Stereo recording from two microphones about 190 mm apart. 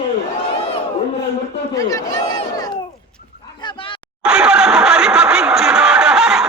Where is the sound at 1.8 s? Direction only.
15° left (ahead or behind).